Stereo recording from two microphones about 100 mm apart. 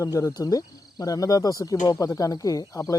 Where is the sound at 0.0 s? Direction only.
35° left (ahead or behind).